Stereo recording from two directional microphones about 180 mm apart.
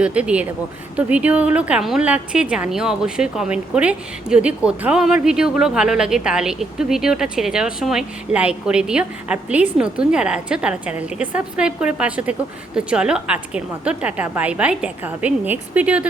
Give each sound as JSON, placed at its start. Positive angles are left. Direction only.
{"t": 0.0, "sound": "a woman's voice", "side_deg": -5}